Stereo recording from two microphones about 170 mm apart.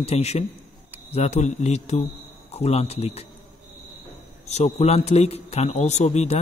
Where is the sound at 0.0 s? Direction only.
35° left (ahead or behind).